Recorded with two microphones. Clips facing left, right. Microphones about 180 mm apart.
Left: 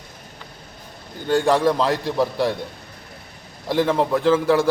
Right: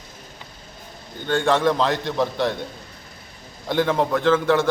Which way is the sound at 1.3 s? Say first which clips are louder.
Left 2 dB; 35° left (ahead or behind).